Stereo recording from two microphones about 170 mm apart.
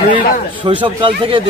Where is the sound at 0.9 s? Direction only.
30° right (ahead or behind).